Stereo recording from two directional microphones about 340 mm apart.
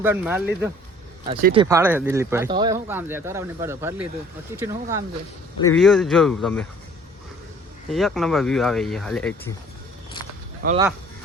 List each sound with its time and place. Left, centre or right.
0.0 s speech: centre
1.3 s speech: right
1.6 s speech: centre
5.6 s speech: centre
7.9 s speech: centre
10.6 s speech: right